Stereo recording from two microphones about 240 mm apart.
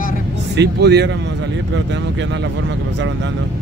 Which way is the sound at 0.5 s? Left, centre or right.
Right.